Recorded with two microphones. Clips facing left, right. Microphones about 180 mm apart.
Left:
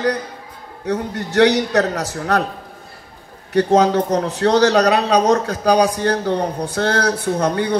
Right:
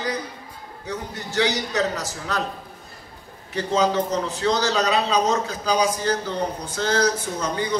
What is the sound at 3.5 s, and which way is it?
Speech, 60° left (ahead or behind).